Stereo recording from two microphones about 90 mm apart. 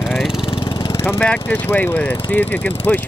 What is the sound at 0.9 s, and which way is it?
Lawn mower, 25° left (ahead or behind).